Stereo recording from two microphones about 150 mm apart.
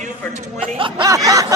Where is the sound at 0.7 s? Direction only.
35° right (ahead or behind).